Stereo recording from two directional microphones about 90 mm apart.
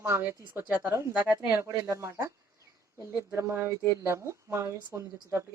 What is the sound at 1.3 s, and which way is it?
Speech, 40° right (ahead or behind).